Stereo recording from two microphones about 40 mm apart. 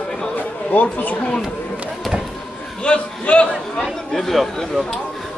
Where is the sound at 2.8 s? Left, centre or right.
Left.